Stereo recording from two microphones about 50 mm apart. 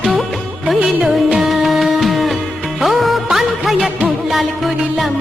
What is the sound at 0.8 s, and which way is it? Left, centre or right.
Music, centre.